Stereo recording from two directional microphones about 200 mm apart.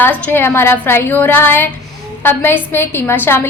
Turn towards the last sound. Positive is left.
turn(degrees=10)  # may be behind; listen again after turning